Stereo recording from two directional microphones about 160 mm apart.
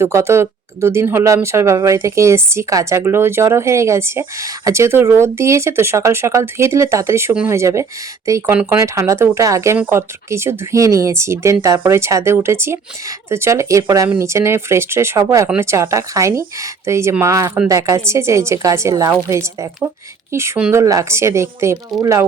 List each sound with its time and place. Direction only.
0.0 s a woman's voice: 15° right (ahead or behind)